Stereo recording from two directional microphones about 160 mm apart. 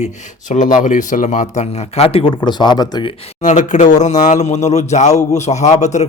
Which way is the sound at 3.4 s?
50° left (ahead or behind).